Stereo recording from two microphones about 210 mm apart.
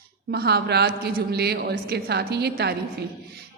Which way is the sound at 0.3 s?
50° right (ahead or behind).